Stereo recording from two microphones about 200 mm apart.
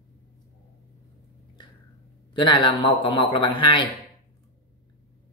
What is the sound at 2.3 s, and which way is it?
A man's voice, 25° left (ahead or behind).